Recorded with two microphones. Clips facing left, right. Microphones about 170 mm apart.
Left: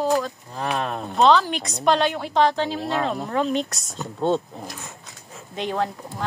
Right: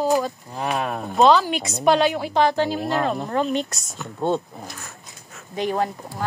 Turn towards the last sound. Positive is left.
turn(degrees=-10)  # may be behind; listen again after turning